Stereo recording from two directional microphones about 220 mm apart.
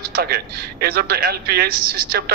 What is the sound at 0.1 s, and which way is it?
A man's voice, 45° right (ahead or behind).